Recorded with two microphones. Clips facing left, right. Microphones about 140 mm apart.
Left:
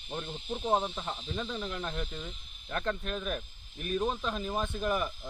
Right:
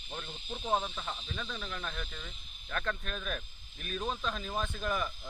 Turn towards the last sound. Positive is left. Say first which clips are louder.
# left 3 dB
turn(degrees=15)  # may be behind; listen again after turning